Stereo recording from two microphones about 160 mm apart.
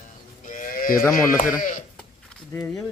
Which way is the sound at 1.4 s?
55° left (ahead or behind).